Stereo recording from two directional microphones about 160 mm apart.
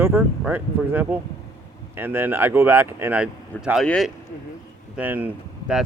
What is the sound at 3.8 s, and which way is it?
Speech, 5° left (ahead or behind).